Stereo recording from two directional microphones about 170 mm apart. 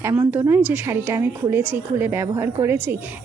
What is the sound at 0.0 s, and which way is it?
A woman's voice, 15° right (ahead or behind).